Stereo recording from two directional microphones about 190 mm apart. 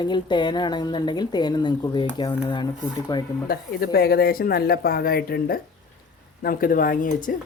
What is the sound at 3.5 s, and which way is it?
Speech, 55° left (ahead or behind).